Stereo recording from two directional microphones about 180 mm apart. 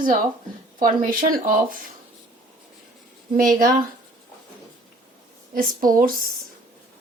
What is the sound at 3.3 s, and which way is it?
Speech, 50° right (ahead or behind).